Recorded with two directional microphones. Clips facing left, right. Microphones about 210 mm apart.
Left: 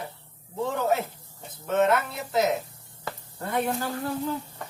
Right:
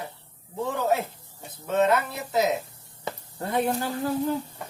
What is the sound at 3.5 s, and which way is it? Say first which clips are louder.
Speech: right 2 dB; 25° right (ahead or behind).